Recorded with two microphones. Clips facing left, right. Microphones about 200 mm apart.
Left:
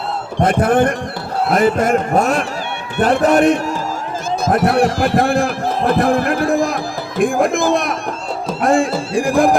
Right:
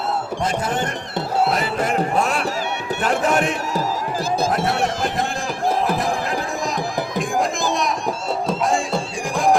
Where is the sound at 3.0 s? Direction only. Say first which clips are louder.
Left 8 dB; 40° left (ahead or behind).